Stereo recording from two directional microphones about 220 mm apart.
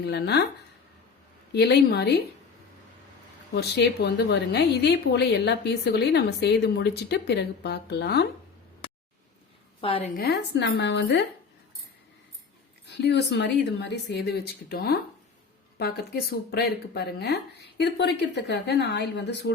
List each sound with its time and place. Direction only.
0.0 s a woman's voice: 50° left (ahead or behind)
1.5 s a woman's voice: 50° left (ahead or behind)
3.5 s a woman's voice: 50° left (ahead or behind)
9.8 s a woman's voice: 25° left (ahead or behind)
10.2 s a woman's voice: 50° left (ahead or behind)
12.8 s a woman's voice: 50° left (ahead or behind)